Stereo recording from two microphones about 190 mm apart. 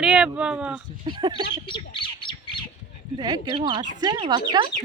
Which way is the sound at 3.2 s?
20° right (ahead or behind).